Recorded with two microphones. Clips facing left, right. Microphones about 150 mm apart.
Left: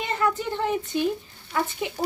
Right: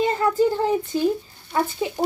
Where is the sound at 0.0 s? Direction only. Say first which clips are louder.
Right 7 dB; 35° right (ahead or behind).